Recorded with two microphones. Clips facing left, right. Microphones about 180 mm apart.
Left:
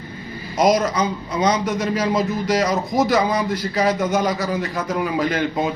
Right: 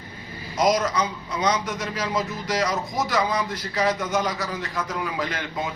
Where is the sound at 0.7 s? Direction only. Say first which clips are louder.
Left 4 dB; 30° left (ahead or behind).